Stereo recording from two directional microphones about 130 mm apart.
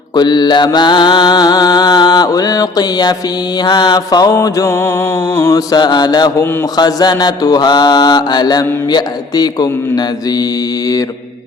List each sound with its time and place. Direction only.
0.1 s mantra: 35° left (ahead or behind)